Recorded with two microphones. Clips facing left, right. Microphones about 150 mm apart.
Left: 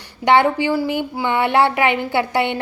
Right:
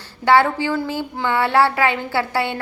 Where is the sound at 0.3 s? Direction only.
20° left (ahead or behind).